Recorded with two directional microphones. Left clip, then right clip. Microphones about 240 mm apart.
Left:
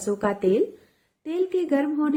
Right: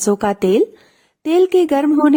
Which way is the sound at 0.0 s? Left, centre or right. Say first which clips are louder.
Right 7 dB; right.